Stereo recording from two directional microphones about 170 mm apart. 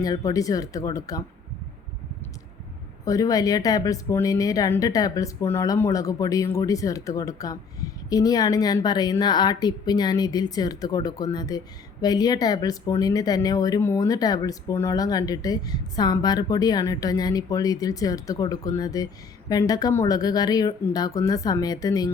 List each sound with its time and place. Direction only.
0.0 s speech: 20° left (ahead or behind)
3.0 s speech: 20° left (ahead or behind)